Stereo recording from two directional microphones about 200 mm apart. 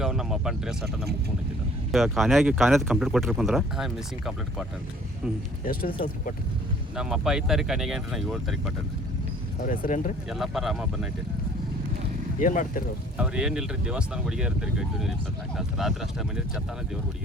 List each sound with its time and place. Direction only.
0.0 s speech: centre (ahead or behind)
6.9 s speech: 5° right (ahead or behind)
9.6 s speech: 40° left (ahead or behind)
10.2 s speech: centre (ahead or behind)
12.4 s speech: 40° left (ahead or behind)
13.1 s speech: 5° right (ahead or behind)